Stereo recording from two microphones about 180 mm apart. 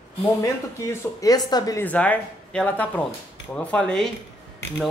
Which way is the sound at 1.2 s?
20° left (ahead or behind).